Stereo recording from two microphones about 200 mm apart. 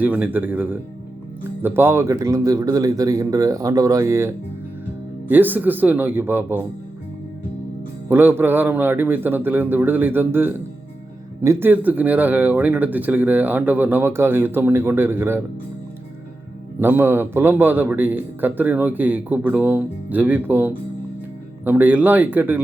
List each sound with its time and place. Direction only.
0.0 s speech: 10° right (ahead or behind)
8.1 s speech: 10° right (ahead or behind)
16.8 s speech: 10° right (ahead or behind)